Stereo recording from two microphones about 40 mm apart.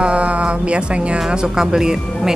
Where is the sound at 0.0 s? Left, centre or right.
Right.